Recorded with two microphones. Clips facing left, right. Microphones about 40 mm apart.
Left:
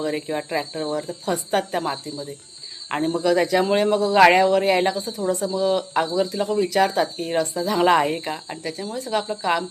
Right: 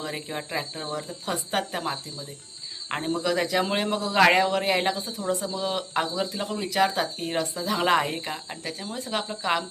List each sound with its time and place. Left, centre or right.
0.0 s speech: centre
1.2 s speech: centre
2.9 s speech: centre
5.3 s speech: centre
8.9 s speech: right
9.2 s speech: centre